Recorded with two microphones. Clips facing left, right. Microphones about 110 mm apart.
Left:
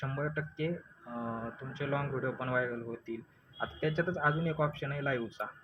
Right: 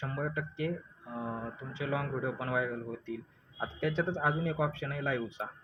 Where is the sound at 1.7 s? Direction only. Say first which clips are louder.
Even; 35° left (ahead or behind).